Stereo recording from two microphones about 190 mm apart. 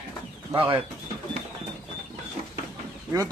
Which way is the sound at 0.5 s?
25° right (ahead or behind).